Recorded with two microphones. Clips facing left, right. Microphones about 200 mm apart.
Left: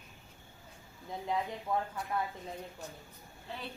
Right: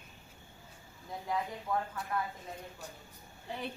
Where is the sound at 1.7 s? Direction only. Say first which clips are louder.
Left 1 dB; 20° left (ahead or behind).